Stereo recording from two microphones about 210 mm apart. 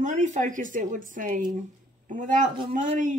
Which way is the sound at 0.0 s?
35° right (ahead or behind).